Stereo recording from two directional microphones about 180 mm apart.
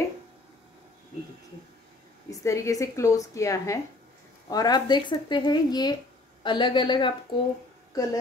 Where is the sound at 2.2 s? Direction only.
15° left (ahead or behind).